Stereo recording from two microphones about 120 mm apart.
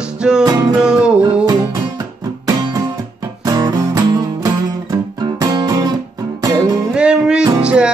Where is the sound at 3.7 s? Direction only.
30° right (ahead or behind).